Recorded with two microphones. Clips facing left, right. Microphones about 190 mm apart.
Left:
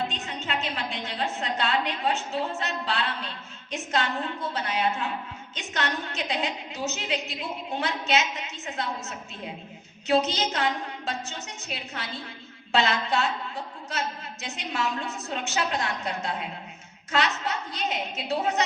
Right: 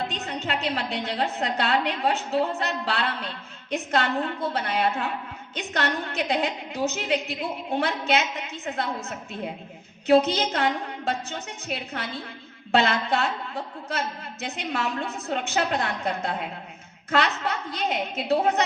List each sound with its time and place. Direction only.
0.1 s a woman's voice: 65° right (ahead or behind)
14.4 s a woman's voice: 55° right (ahead or behind)